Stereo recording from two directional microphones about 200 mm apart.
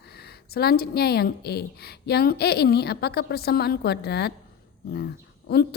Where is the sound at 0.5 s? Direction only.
50° left (ahead or behind).